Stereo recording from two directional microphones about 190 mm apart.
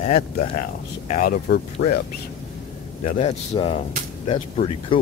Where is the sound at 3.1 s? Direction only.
30° left (ahead or behind).